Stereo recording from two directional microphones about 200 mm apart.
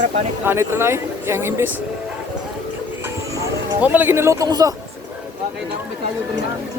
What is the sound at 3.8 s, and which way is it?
Speech, 10° right (ahead or behind).